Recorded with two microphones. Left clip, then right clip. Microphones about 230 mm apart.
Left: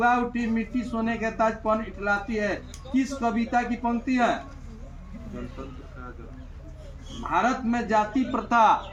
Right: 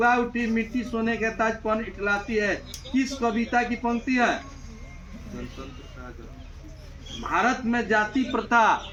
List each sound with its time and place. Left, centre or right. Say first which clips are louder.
0.0 s a man's voice: right 1 dB; left
7.2 s a man's voice: right 1 dB; left